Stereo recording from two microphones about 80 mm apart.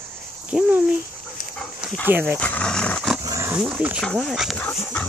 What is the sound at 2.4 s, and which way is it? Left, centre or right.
Speech, centre.